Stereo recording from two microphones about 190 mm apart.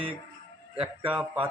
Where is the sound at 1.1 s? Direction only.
5° right (ahead or behind).